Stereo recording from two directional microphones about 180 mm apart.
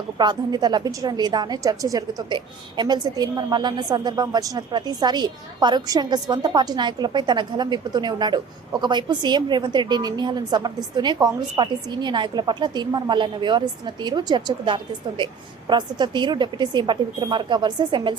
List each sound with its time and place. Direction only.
0.2 s a woman's voice: 25° right (ahead or behind)